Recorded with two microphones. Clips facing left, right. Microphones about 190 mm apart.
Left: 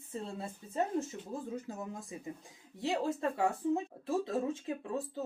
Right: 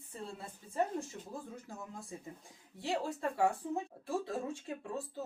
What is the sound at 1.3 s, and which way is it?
Speech, 20° left (ahead or behind).